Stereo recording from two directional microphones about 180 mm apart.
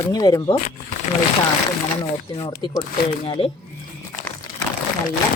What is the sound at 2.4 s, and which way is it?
Speech, 25° left (ahead or behind).